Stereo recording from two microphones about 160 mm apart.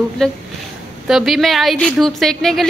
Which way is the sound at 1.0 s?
Centre (ahead or behind).